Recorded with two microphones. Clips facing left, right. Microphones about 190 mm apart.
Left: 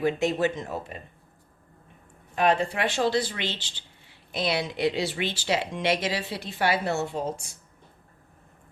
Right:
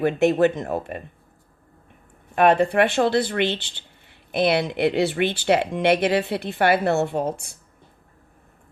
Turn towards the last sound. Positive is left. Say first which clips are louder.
# right 6 dB
turn(degrees=-60)  # may be behind; listen again after turning